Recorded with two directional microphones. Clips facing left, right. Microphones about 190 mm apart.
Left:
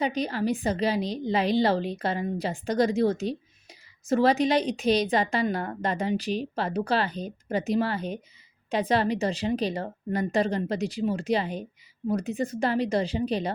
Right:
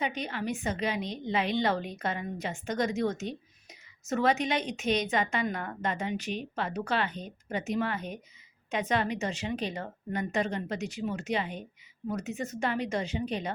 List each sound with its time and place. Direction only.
0.0 s a woman's voice: 35° left (ahead or behind)